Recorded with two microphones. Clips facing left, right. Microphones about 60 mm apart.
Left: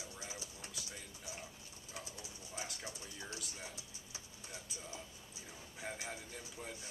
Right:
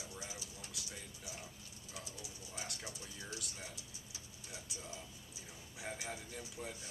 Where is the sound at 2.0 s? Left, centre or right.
Left.